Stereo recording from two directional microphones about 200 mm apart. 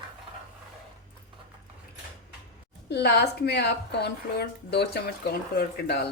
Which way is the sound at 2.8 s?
55° left (ahead or behind).